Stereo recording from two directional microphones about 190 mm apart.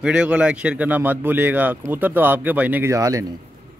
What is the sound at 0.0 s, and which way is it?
Speech, 5° right (ahead or behind).